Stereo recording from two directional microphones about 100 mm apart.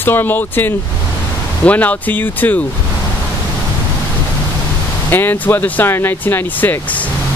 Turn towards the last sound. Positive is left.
turn(degrees=20)  # may be behind; listen again after turning